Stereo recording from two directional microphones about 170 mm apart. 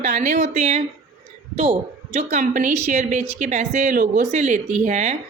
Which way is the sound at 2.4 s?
50° right (ahead or behind).